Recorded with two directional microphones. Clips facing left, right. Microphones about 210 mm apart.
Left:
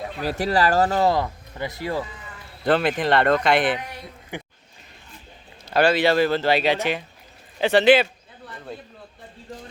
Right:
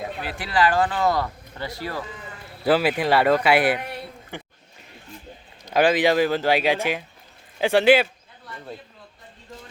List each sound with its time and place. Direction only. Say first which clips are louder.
0.2 s speech: left 3 dB; 40° left (ahead or behind)
1.1 s speech: left 2 dB; 20° left (ahead or behind)
2.6 s speech: even; 5° right (ahead or behind)
4.3 s a sound: left 4 dB; 15° left (ahead or behind)
5.6 s speech: even; 15° right (ahead or behind)